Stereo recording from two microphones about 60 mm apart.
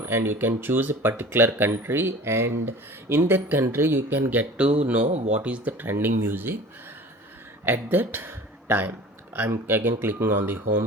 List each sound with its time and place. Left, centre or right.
0.0 s speech: right
4.5 s speech: right
7.6 s speech: right